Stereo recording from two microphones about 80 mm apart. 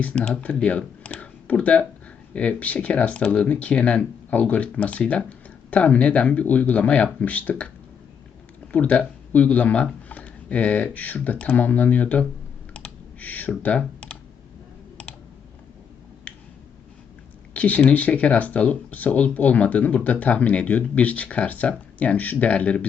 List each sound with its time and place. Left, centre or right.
0.0 s speech: centre
8.7 s speech: centre
12.7 s computer keyboard: centre
17.5 s speech: centre